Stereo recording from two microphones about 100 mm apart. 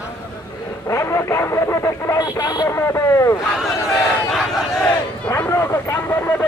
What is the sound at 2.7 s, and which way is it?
Speech, 25° left (ahead or behind).